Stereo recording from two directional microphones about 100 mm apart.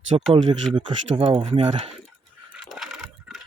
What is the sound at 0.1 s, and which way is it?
Speech, 55° right (ahead or behind).